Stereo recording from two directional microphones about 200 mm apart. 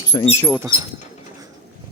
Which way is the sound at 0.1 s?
25° left (ahead or behind).